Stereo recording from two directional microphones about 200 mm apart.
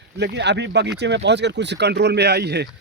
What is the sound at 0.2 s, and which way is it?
Speech, 60° right (ahead or behind).